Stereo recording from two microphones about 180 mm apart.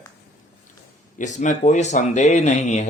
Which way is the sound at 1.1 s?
40° left (ahead or behind).